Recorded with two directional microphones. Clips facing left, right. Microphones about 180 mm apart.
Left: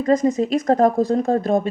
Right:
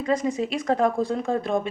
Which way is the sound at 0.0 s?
40° left (ahead or behind).